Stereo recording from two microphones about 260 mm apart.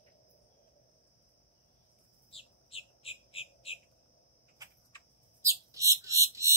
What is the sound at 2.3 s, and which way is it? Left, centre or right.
Bird, left.